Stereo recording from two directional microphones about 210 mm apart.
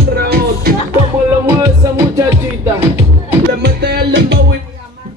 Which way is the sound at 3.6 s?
50° right (ahead or behind).